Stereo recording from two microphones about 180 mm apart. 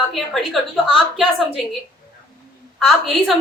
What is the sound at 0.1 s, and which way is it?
A woman's voice, centre (ahead or behind).